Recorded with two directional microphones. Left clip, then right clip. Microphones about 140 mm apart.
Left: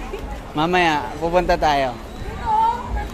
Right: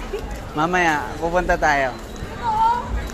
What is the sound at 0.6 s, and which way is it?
Speech, 50° left (ahead or behind).